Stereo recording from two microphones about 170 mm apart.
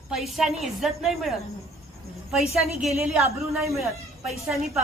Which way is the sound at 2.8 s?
Centre (ahead or behind).